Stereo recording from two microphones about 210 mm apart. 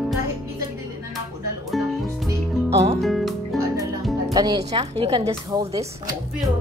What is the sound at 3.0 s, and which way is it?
Music, centre (ahead or behind).